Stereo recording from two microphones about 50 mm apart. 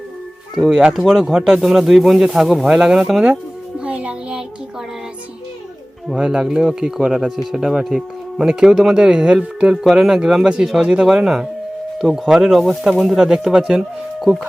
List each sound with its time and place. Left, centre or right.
0.7 s speech: centre
0.9 s speech: centre
3.8 s music: right
6.1 s speech: centre
9.0 s speech: centre